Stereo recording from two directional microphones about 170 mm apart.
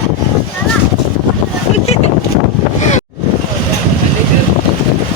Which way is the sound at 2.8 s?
45° left (ahead or behind).